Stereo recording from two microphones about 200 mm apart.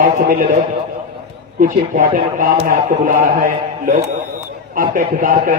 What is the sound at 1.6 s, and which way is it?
A man's voice, 40° right (ahead or behind).